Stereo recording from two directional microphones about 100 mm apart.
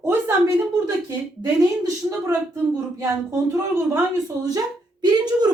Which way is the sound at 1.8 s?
30° right (ahead or behind).